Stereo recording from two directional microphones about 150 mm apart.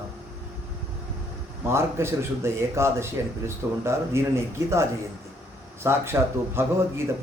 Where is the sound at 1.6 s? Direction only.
15° right (ahead or behind).